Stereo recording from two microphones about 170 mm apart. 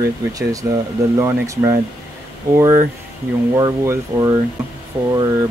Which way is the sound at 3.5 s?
20° right (ahead or behind).